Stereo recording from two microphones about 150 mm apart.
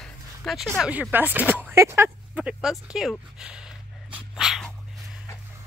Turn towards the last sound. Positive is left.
turn(degrees=-5)  # may be behind; listen again after turning